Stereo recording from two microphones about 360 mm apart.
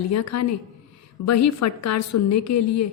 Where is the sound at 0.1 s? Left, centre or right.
Left.